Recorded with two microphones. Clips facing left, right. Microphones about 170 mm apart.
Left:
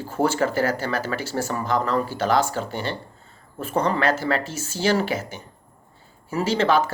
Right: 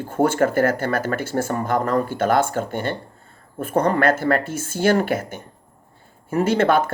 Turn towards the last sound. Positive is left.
turn(degrees=-55)  # may be behind; listen again after turning